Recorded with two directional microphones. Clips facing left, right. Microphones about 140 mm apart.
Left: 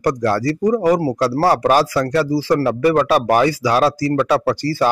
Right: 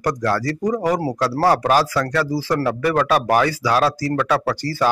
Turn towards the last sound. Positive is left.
turn(degrees=10)  # may be behind; listen again after turning